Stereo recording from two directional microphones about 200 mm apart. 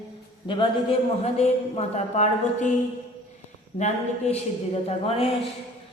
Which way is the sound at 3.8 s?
35° left (ahead or behind).